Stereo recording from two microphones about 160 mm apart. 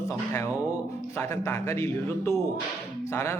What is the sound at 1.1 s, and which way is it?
Speech, 15° left (ahead or behind).